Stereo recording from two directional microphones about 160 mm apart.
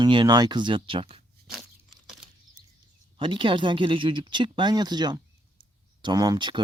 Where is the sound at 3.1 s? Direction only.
30° right (ahead or behind).